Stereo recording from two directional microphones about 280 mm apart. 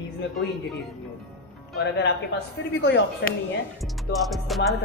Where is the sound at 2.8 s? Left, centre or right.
Left.